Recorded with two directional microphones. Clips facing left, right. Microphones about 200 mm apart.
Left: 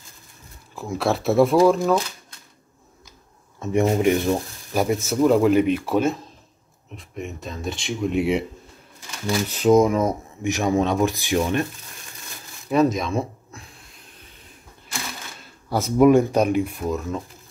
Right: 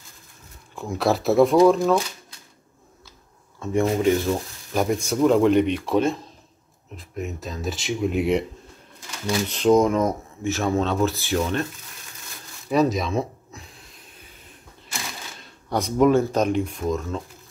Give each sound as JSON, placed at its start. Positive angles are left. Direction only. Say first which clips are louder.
{"t": 0.7, "sound": "speech", "louder": "right 1 dB", "side_deg": 0}
{"t": 3.5, "sound": "speech", "louder": "left 2 dB", "side_deg": 20}
{"t": 4.8, "sound": "speech", "louder": "left 1 dB", "side_deg": 5}
{"t": 12.6, "sound": "speech", "louder": "left 1 dB", "side_deg": 0}
{"t": 14.9, "sound": "speech", "louder": "left 1 dB", "side_deg": 0}